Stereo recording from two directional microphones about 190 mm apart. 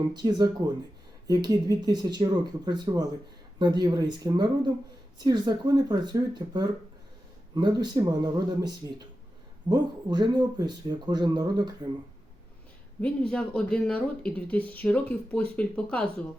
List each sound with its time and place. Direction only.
0.1 s speech: 20° right (ahead or behind)
13.0 s speech: 5° left (ahead or behind)